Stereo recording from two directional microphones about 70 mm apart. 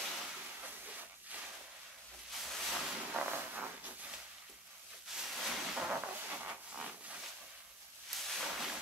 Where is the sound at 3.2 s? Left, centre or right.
Right.